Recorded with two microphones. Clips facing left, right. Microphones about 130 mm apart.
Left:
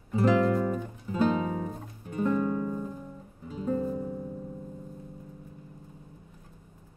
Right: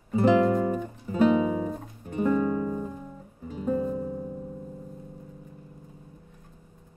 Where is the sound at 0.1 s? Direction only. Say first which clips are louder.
Right 3 dB; 20° right (ahead or behind).